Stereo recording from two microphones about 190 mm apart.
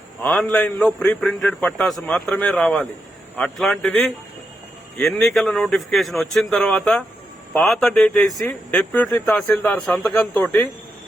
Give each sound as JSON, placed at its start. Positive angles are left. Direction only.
{"t": 0.2, "sound": "a man's voice", "side_deg": 5}
{"t": 8.3, "sound": "speech", "side_deg": 20}
{"t": 8.7, "sound": "speech", "side_deg": 5}